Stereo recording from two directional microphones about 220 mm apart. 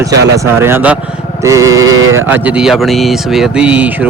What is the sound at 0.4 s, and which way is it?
Speech, 10° right (ahead or behind).